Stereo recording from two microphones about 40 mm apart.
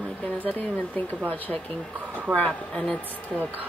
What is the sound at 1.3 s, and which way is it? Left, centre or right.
Speech, left.